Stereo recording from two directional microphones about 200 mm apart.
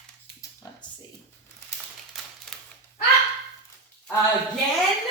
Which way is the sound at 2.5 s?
Centre (ahead or behind).